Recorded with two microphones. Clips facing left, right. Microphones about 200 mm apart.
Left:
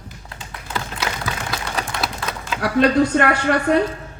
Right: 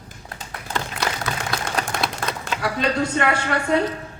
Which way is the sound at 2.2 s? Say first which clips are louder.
Right 1 dB; 50° right (ahead or behind).